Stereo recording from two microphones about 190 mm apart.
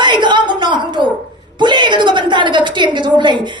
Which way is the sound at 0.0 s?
25° right (ahead or behind).